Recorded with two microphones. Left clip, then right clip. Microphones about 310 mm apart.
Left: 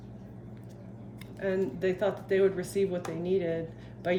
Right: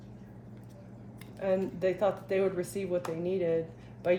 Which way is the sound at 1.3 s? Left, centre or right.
Centre.